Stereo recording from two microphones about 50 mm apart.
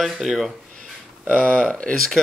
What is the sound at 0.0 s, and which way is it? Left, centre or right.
Speech, centre.